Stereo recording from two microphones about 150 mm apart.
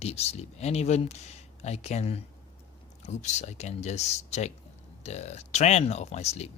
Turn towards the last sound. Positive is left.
turn(degrees=45)  # may be behind; listen again after turning